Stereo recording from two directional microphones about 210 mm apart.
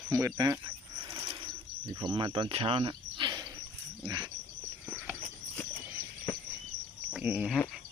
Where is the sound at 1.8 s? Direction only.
20° right (ahead or behind).